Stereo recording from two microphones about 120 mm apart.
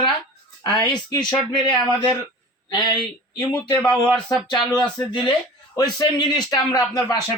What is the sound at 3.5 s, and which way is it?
Speech, 10° left (ahead or behind).